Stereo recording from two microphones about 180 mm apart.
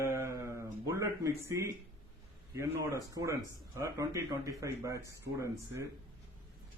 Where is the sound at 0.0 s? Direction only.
15° right (ahead or behind).